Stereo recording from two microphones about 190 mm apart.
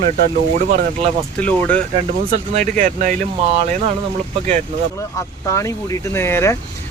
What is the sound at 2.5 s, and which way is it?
Speech, 45° right (ahead or behind).